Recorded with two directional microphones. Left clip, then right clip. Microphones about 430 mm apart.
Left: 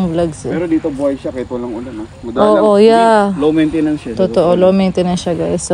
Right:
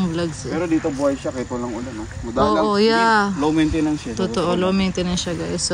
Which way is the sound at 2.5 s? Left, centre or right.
Centre.